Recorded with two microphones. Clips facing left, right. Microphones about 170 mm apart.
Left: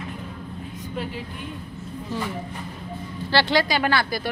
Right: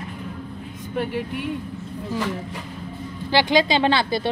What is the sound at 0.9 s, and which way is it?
Speech, 60° right (ahead or behind).